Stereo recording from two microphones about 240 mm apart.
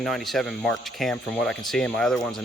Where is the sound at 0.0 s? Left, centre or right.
Centre.